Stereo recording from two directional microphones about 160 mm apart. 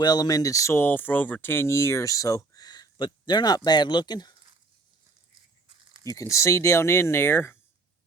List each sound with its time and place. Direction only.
0.0 s speech: 25° left (ahead or behind)
5.6 s a sound: 30° right (ahead or behind)
6.1 s speech: 20° left (ahead or behind)